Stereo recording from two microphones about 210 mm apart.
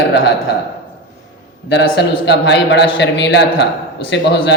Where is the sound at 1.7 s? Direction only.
55° left (ahead or behind).